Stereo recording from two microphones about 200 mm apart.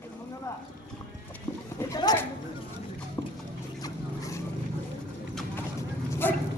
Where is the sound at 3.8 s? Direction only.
15° left (ahead or behind).